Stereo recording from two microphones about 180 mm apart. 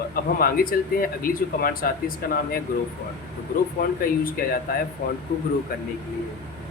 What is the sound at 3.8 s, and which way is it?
Speech, 55° left (ahead or behind).